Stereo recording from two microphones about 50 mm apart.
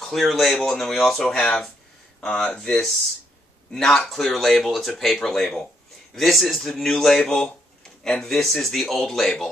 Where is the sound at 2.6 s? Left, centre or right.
Centre.